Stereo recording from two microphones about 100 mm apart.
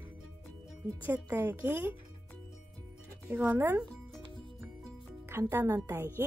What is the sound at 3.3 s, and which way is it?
Speech, 15° right (ahead or behind).